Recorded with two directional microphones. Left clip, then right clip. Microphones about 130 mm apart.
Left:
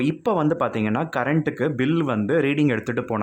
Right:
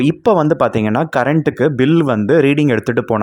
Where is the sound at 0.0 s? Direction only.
45° right (ahead or behind).